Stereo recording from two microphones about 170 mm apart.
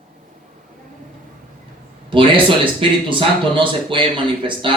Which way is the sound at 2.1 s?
30° right (ahead or behind).